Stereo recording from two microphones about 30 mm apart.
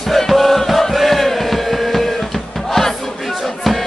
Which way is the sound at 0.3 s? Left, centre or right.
Centre.